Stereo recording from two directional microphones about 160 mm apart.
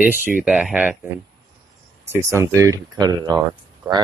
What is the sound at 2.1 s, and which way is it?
Speech, 15° right (ahead or behind).